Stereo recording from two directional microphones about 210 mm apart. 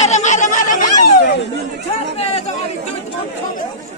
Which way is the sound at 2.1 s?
30° left (ahead or behind).